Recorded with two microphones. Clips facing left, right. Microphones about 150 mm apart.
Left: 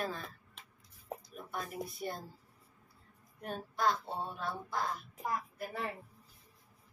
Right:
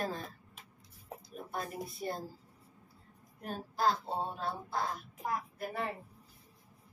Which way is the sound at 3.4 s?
35° right (ahead or behind).